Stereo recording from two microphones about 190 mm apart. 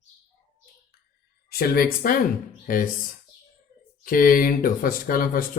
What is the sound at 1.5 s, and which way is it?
Speech, 55° left (ahead or behind).